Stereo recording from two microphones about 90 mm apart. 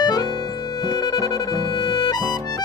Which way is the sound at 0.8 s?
50° left (ahead or behind).